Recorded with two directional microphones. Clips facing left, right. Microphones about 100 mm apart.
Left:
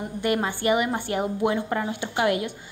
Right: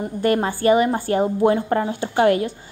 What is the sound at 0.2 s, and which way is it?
A woman's voice, 40° right (ahead or behind).